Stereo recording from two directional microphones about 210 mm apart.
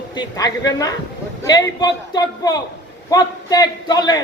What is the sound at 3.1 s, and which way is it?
A man's voice, 20° left (ahead or behind).